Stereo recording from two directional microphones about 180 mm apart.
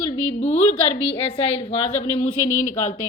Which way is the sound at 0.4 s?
35° left (ahead or behind).